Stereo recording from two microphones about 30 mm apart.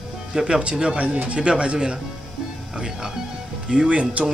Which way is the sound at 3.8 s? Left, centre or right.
Right.